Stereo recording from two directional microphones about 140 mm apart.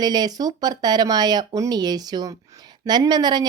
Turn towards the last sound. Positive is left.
turn(degrees=-30)  # may be behind; listen again after turning